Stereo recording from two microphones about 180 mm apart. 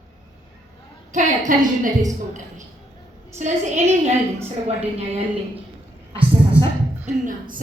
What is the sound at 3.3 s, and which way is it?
Speech, 40° right (ahead or behind).